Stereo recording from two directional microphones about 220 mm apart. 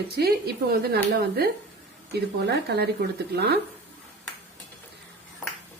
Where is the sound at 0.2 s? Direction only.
45° right (ahead or behind).